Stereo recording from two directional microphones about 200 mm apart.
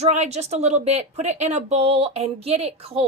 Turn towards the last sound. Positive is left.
turn(degrees=-30)  # may be behind; listen again after turning